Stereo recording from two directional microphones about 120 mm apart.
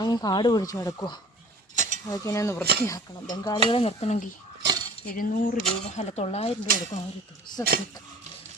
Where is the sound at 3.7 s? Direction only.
55° left (ahead or behind); by 4.3 s 75° left (ahead or behind).